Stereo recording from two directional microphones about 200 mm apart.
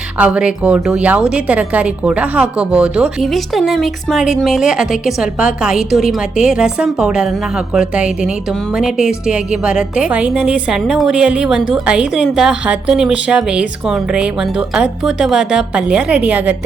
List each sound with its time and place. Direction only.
0.2 s a woman's voice: 5° right (ahead or behind)